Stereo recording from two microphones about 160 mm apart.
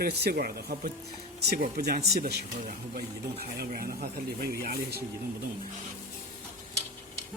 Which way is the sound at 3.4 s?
70° right (ahead or behind).